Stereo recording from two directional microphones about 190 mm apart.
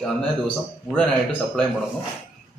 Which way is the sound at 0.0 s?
5° left (ahead or behind).